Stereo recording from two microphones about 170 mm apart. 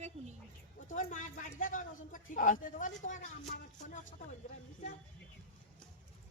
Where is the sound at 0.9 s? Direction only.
50° left (ahead or behind).